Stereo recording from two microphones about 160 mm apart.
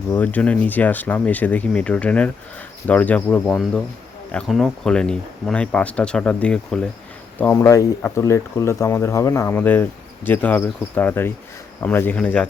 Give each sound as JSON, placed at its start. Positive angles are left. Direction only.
{"t": 0.1, "sound": "speech", "side_deg": 10}
{"t": 3.4, "sound": "speech", "side_deg": 0}